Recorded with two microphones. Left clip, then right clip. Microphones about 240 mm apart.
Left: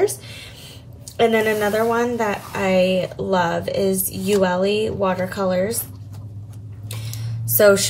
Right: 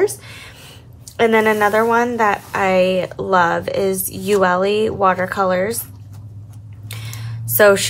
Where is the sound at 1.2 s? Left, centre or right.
Centre.